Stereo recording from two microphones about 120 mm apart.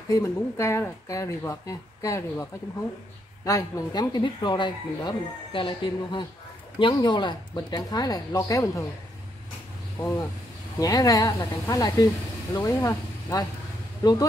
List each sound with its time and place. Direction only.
0.1 s speech: 25° left (ahead or behind)
3.4 s speech: 30° left (ahead or behind)
10.8 s speech: 30° left (ahead or behind)